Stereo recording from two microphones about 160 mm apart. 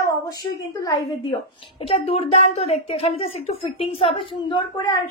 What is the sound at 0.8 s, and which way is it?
A woman's voice, 30° left (ahead or behind).